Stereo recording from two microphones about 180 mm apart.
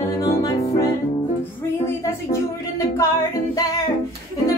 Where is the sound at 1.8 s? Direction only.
15° left (ahead or behind).